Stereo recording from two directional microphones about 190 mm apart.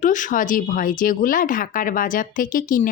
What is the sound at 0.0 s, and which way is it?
Speech, 40° left (ahead or behind).